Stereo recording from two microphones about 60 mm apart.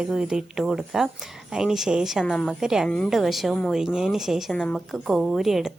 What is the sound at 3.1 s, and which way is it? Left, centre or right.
A woman's voice, centre.